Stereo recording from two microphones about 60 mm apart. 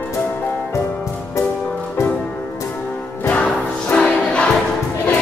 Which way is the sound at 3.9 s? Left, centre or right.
Centre.